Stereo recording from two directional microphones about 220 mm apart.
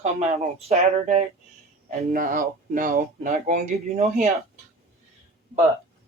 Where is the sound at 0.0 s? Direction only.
30° right (ahead or behind).